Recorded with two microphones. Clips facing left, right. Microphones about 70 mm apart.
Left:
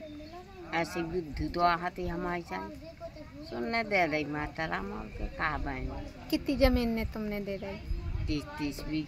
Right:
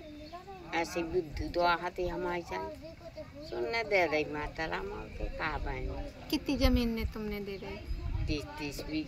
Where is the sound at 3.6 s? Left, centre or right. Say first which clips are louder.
Left 1 dB; left.